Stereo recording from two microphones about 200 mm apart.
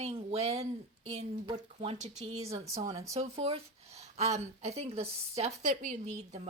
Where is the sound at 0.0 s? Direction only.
30° right (ahead or behind).